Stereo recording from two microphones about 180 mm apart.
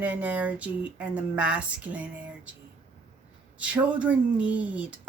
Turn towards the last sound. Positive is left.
turn(degrees=-5)  # may be behind; listen again after turning